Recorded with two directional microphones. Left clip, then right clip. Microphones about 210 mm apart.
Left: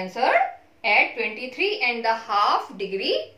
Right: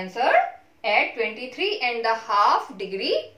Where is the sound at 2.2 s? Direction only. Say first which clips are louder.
Right 3 dB; 15° right (ahead or behind).